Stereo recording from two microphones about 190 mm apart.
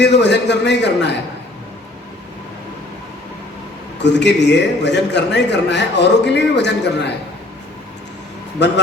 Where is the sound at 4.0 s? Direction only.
65° left (ahead or behind).